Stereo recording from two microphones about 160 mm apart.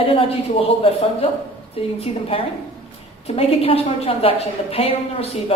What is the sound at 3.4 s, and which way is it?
A woman's voice, 35° left (ahead or behind).